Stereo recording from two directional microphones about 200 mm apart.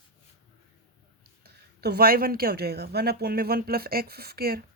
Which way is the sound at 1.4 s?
50° right (ahead or behind).